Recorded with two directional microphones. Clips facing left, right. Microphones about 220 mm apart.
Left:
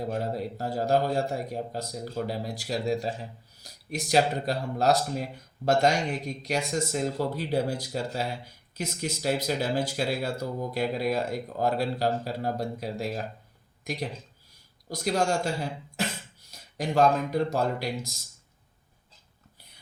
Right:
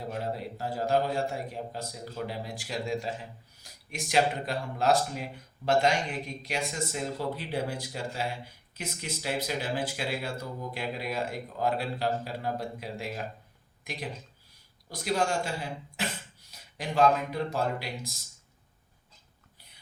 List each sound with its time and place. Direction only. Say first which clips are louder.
0.1 s a man's voice: left 4 dB; 40° left (ahead or behind)
16.0 s cough: left 4 dB; 40° left (ahead or behind)
16.5 s a man's voice: left 6 dB; 45° left (ahead or behind)